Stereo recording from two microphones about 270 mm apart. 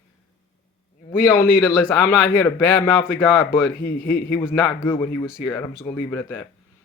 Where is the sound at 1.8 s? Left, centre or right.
Centre.